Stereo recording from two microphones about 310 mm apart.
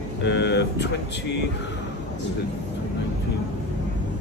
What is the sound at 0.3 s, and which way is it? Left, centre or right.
Speech, left.